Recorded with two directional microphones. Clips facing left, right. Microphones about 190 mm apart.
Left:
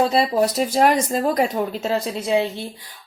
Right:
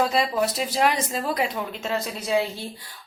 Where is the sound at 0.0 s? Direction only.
35° left (ahead or behind).